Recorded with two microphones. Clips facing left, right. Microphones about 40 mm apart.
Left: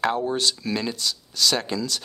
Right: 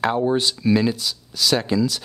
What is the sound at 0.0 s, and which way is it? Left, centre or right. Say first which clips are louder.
Speech: right 3 dB; centre.